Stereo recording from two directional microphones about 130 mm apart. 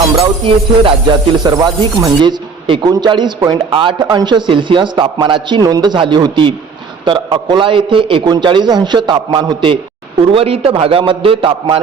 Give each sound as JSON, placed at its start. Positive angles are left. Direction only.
{"t": 0.2, "sound": "a man's voice", "side_deg": -45}
{"t": 1.5, "sound": "a man's voice", "side_deg": -30}
{"t": 10.3, "sound": "a man's voice", "side_deg": -50}